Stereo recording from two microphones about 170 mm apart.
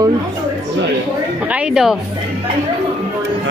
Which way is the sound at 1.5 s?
Centre (ahead or behind).